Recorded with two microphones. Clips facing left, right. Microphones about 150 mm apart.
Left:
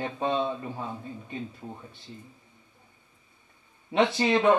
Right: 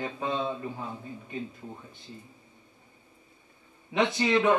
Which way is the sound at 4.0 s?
30° left (ahead or behind).